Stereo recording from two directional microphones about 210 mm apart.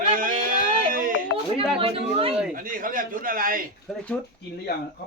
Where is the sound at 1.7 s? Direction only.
25° right (ahead or behind).